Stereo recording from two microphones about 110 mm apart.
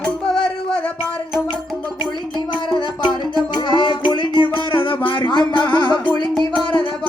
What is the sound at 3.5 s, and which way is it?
Music, 45° left (ahead or behind).